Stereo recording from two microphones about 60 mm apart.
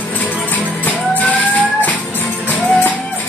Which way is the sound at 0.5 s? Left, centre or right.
Left.